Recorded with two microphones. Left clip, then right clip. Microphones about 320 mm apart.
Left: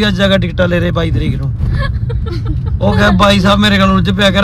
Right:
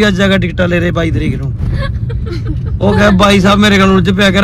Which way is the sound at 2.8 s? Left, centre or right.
Centre.